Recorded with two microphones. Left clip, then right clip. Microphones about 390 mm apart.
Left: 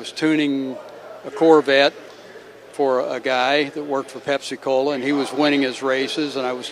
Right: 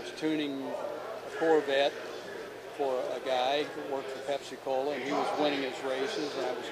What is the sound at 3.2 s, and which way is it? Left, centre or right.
A man's voice, left.